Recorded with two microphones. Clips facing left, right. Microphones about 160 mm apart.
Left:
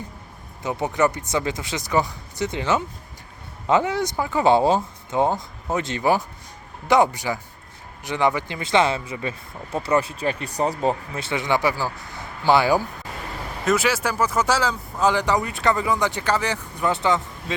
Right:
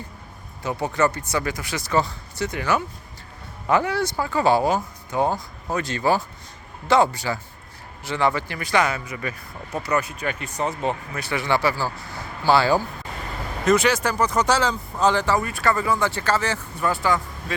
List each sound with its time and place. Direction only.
0.6 s speech: 20° left (ahead or behind); by 10.8 s 35° left (ahead or behind)
10.8 s speech: 25° left (ahead or behind)
13.7 s speech: 5° left (ahead or behind); by 17.2 s 20° left (ahead or behind)